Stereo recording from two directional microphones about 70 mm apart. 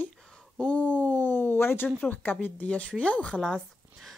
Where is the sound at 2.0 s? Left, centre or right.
Left.